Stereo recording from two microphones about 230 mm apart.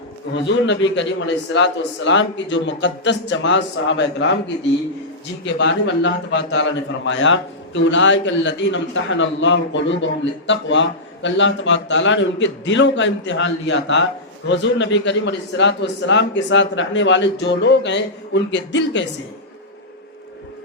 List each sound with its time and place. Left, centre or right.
0.6 s a man's voice: left
5.5 s a man's voice: left